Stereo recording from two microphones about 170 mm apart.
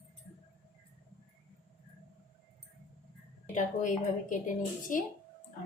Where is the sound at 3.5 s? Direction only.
50° left (ahead or behind).